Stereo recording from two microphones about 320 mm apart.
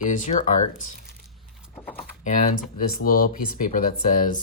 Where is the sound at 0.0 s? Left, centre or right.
Left.